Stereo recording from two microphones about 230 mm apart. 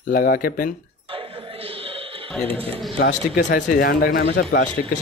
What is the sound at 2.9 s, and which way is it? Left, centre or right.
Speech, left.